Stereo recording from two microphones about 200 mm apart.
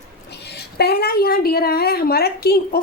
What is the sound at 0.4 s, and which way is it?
A woman's voice, 55° left (ahead or behind).